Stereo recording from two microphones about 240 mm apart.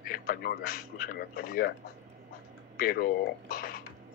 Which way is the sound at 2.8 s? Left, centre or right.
Left.